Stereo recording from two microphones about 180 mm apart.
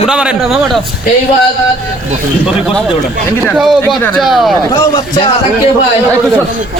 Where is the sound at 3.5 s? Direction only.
Centre (ahead or behind).